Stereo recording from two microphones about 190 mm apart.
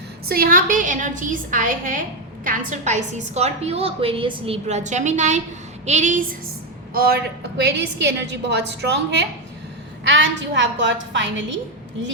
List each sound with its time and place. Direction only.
0.3 s a woman's voice: 50° right (ahead or behind)
6.9 s a woman's voice: 55° right (ahead or behind); by 11.4 s 75° right (ahead or behind)